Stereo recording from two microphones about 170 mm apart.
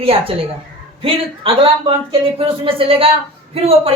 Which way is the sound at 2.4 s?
35° right (ahead or behind).